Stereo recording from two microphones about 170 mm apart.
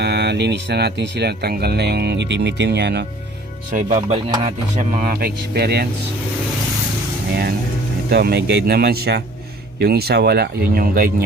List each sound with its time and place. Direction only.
0.0 s speech: 80° right
3.7 s speech: 50° right (ahead or behind)
5.5 s speech: 70° right (ahead or behind)
8.1 s speech: 75° right (ahead or behind)